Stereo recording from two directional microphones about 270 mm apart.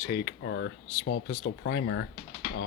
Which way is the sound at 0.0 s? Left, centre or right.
Left.